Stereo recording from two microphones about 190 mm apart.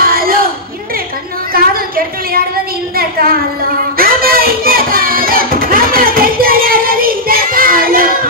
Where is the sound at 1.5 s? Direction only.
50° right (ahead or behind).